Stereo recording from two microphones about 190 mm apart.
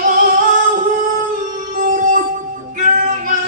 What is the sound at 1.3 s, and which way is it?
Music, 45° right (ahead or behind).